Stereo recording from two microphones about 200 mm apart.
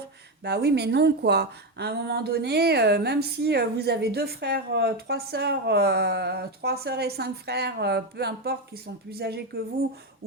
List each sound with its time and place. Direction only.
0.4 s a woman's voice: 55° right (ahead or behind)